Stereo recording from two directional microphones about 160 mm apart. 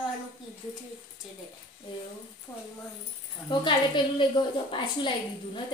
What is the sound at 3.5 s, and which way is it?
A woman's voice, 30° left (ahead or behind).